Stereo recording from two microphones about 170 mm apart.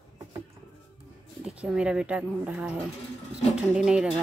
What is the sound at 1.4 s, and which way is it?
Speech, 5° right (ahead or behind).